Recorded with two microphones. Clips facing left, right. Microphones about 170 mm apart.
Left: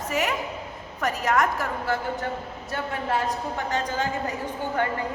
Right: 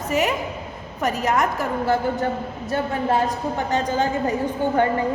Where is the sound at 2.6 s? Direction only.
30° right (ahead or behind).